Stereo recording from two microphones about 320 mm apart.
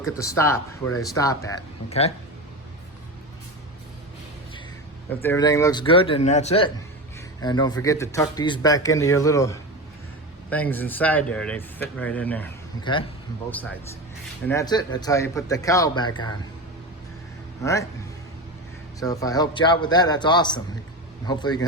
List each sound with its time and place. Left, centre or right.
0.0 s speech: centre
5.0 s speech: centre
14.4 s speech: centre
17.6 s speech: centre
18.9 s speech: centre